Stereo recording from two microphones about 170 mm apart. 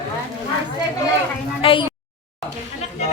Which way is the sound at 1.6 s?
30° left (ahead or behind).